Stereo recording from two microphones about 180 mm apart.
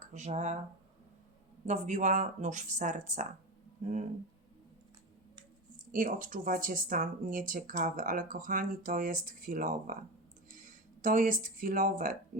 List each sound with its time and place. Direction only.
0.0 s speech: 40° right (ahead or behind)
1.6 s speech: 40° right (ahead or behind)
5.9 s speech: 50° right (ahead or behind)